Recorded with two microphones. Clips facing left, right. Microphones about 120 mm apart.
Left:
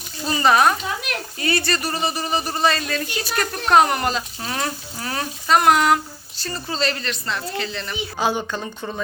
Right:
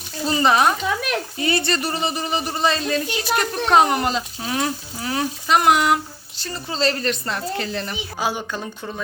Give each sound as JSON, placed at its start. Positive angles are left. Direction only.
{"t": 0.3, "sound": "speech", "side_deg": -20}
{"t": 7.0, "sound": "speech", "side_deg": -45}
{"t": 8.2, "sound": "speech", "side_deg": 0}